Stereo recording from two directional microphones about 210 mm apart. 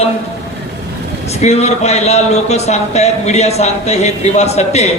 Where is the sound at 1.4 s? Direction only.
30° left (ahead or behind).